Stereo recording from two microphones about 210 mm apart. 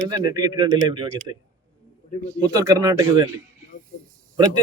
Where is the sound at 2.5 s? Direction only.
15° right (ahead or behind).